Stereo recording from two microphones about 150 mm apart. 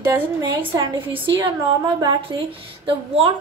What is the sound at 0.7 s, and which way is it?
A woman's voice, 35° right (ahead or behind).